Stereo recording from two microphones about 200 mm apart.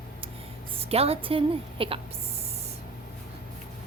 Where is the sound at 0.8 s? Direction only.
30° right (ahead or behind).